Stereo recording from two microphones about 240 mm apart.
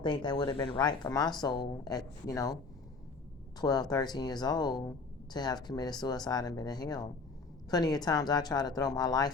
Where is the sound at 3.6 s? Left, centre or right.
Centre.